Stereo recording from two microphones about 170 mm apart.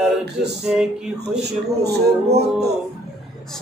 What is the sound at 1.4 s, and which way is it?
Speech, 75° right (ahead or behind).